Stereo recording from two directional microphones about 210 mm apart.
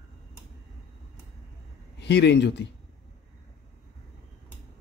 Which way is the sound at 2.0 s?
55° left (ahead or behind).